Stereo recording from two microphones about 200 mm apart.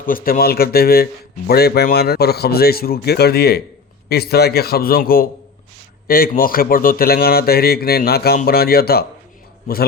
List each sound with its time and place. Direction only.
0.0 s speech: 45° left (ahead or behind)